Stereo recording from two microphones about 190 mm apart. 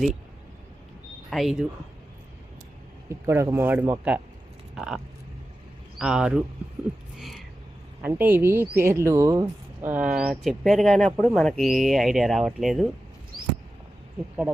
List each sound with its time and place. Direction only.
1.3 s speech: centre (ahead or behind)
3.1 s speech: 15° right (ahead or behind)
6.0 s speech: 5° right (ahead or behind)
7.2 s a sound: centre (ahead or behind)
8.0 s speech: 10° right (ahead or behind)